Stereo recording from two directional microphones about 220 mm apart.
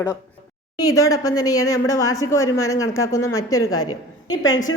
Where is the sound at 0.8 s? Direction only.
15° left (ahead or behind).